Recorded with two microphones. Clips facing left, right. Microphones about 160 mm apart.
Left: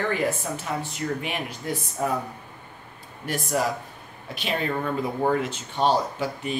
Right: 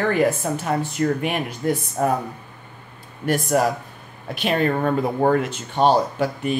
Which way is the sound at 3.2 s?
55° right (ahead or behind).